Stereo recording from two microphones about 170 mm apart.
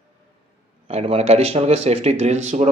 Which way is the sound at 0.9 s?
35° right (ahead or behind).